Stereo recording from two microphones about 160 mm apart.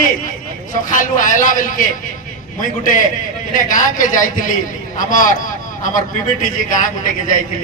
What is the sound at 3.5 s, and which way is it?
A man's voice, 55° left (ahead or behind).